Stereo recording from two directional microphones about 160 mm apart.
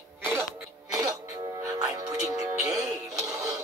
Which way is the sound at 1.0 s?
20° right (ahead or behind).